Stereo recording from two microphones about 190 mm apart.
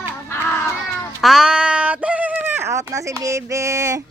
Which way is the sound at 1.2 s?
Centre (ahead or behind).